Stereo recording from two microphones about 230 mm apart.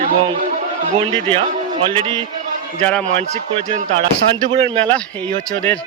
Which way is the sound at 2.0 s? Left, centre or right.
Centre.